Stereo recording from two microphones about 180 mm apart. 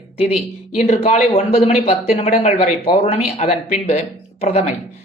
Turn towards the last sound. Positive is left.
turn(degrees=35)  # may be behind; listen again after turning